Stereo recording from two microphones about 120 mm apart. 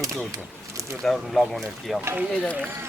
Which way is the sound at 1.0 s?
Centre (ahead or behind).